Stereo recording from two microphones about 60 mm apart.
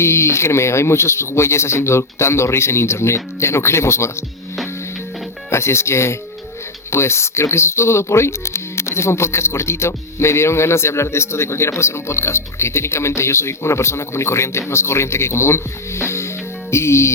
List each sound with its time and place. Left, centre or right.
0.0 s speech: left
5.5 s speech: left
16.7 s music: left